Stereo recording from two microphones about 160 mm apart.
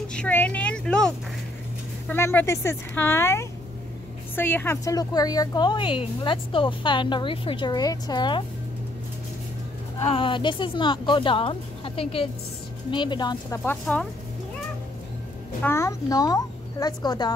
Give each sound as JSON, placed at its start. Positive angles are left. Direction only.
{"t": 0.1, "sound": "a woman's voice", "side_deg": 10}
{"t": 10.0, "sound": "a woman's voice", "side_deg": 35}
{"t": 13.7, "sound": "speech", "side_deg": 5}
{"t": 15.6, "sound": "a woman's voice", "side_deg": 15}